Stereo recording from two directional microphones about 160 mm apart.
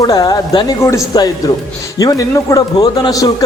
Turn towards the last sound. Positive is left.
turn(degrees=25)  # may be behind; listen again after turning